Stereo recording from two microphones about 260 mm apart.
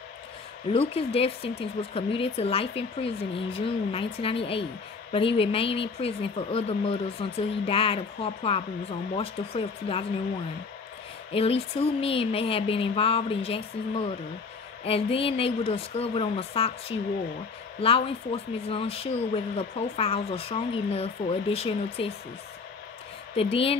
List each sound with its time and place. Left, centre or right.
0.7 s speech: left
11.3 s speech: left
17.8 s speech: left
23.3 s speech: left